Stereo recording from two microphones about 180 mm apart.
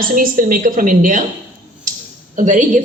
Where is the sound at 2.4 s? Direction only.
45° right (ahead or behind).